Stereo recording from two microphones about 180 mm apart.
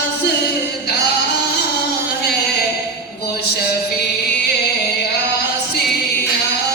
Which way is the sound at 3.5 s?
60° left (ahead or behind).